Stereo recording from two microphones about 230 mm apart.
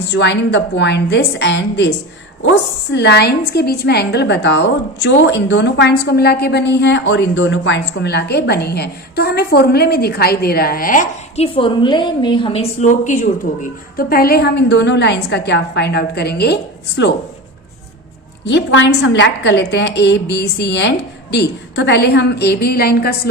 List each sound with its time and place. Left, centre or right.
0.1 s a woman's voice: left
2.9 s a woman's voice: left
11.5 s a woman's voice: left
18.4 s a woman's voice: left